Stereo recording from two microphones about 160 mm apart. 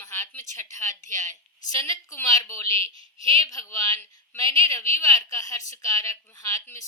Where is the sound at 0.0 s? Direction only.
20° left (ahead or behind).